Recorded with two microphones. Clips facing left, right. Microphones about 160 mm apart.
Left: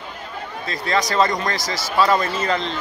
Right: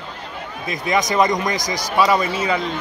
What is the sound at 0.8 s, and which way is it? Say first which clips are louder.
Speech: right 2 dB; 20° right (ahead or behind).